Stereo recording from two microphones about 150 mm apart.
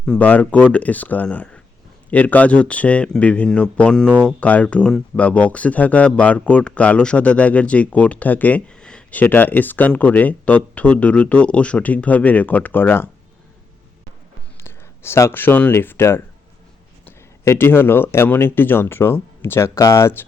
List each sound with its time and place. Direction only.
0.0 s speech: 10° left (ahead or behind)
14.6 s speech: 15° left (ahead or behind)